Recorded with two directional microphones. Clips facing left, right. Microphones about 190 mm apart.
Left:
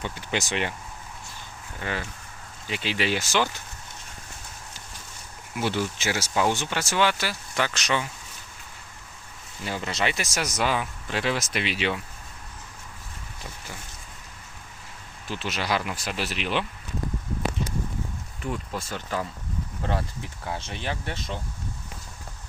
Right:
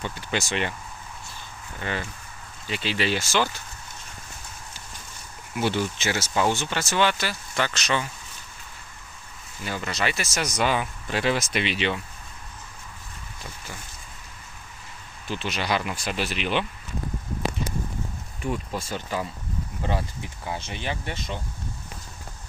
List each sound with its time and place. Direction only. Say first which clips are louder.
0.0 s speech: even; 15° left (ahead or behind)
1.8 s speech: right 1 dB; 5° left (ahead or behind)
5.5 s speech: right 2 dB; centre (ahead or behind)
9.6 s speech: even; 25° left (ahead or behind)
10.3 s speech: right 4 dB; 5° left (ahead or behind)
15.3 s speech: right 1 dB; centre (ahead or behind)
18.4 s speech: right 2 dB; 15° right (ahead or behind); by 21.4 s centre (ahead or behind)